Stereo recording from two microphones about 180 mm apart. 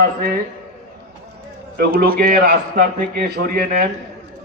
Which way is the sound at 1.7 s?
55° right (ahead or behind).